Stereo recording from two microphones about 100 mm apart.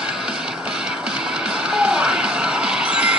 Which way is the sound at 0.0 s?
10° right (ahead or behind).